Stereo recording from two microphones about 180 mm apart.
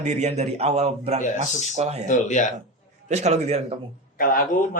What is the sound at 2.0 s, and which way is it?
Speech, 45° left (ahead or behind).